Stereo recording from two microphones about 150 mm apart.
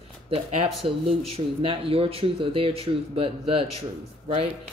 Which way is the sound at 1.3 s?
40° right (ahead or behind).